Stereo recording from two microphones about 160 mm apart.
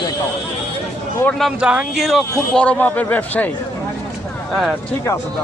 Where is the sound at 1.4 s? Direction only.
5° right (ahead or behind).